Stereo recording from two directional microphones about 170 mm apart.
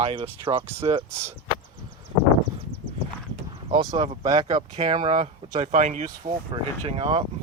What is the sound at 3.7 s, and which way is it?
Speech, 30° right (ahead or behind).